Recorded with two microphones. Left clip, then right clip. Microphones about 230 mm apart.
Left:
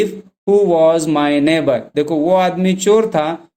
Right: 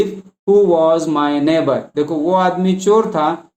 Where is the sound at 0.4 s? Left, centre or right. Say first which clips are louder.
Even; left.